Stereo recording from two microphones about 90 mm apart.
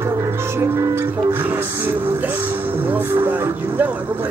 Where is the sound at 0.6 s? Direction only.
30° right (ahead or behind).